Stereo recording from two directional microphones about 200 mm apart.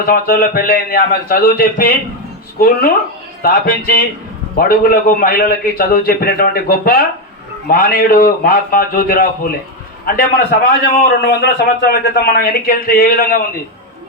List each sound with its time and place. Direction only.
0.0 s a man's voice: 45° left (ahead or behind)